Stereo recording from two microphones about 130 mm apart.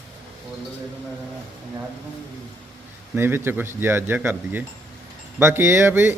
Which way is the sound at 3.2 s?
15° right (ahead or behind).